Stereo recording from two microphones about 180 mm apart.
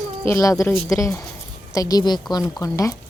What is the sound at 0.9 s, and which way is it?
A woman's voice, 15° left (ahead or behind).